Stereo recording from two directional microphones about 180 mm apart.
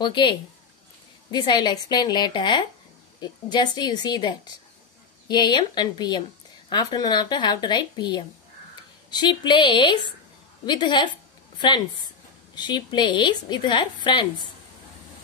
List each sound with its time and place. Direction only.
0.0 s speech: 25° left (ahead or behind)